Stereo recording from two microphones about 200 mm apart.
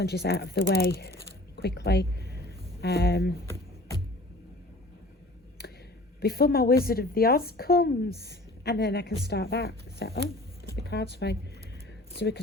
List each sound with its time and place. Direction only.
0.0 s a woman's voice: 55° left (ahead or behind)
3.5 s music: 15° left (ahead or behind)
6.1 s a woman's voice: 50° left (ahead or behind)